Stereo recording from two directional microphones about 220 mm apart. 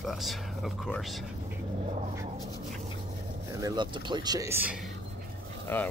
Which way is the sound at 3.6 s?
20° right (ahead or behind).